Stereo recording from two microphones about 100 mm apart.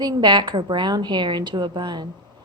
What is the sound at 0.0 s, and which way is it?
A woman's voice, 45° right (ahead or behind).